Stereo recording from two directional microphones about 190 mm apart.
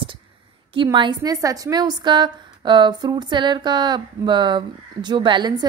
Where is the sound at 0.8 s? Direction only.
20° right (ahead or behind).